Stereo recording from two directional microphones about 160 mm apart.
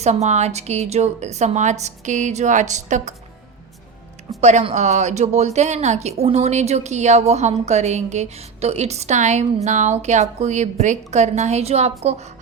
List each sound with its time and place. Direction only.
0.0 s a woman's voice: 45° right (ahead or behind)
4.4 s a woman's voice: 45° right (ahead or behind)